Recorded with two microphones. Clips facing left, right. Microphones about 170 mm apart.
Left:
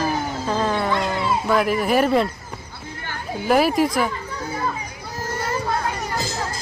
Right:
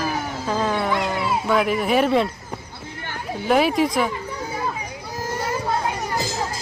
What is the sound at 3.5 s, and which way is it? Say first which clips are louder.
Speech: left 1 dB; 5° left (ahead or behind).